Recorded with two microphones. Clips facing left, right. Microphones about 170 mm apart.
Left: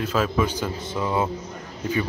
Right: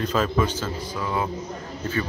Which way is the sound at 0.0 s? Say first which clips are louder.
Even; 5° left (ahead or behind).